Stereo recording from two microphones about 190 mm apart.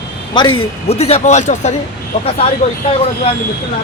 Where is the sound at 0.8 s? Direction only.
35° left (ahead or behind).